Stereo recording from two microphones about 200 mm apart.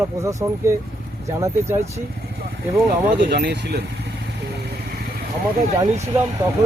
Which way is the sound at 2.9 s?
50° right (ahead or behind).